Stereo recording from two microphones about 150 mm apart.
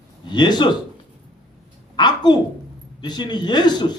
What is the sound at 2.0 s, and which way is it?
A man's voice, 30° left (ahead or behind).